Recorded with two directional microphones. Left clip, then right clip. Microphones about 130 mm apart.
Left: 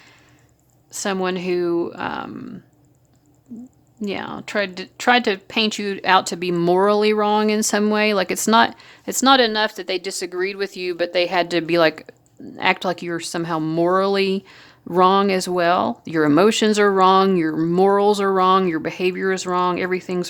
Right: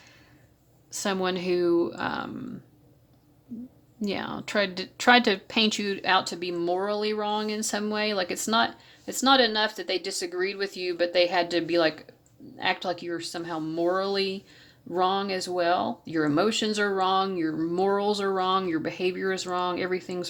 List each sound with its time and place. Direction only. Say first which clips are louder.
0.9 s speech: left 5 dB; 25° left (ahead or behind)
4.0 s speech: left 4 dB; 20° left (ahead or behind); by 20.2 s 40° left (ahead or behind)